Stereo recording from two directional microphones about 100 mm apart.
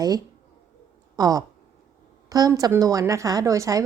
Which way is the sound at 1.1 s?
40° right (ahead or behind).